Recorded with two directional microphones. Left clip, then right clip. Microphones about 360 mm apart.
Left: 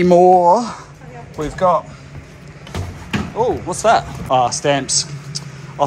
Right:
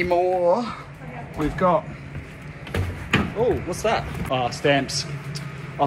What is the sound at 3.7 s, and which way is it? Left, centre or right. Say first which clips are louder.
A man's voice: left 9 dB; centre.